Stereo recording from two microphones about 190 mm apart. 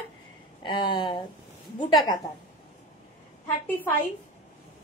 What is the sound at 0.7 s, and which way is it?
Speech, 25° left (ahead or behind).